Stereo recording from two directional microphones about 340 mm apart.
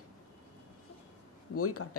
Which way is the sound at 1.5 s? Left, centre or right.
Left.